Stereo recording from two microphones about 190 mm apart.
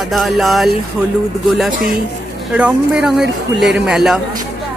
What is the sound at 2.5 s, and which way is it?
Speech, 5° right (ahead or behind).